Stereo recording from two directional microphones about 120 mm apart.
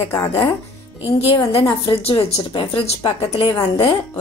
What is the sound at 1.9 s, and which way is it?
Speech, 55° left (ahead or behind).